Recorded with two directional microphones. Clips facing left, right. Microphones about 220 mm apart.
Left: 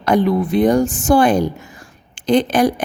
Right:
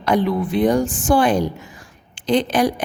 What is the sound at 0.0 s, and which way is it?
A woman's voice, 45° left (ahead or behind).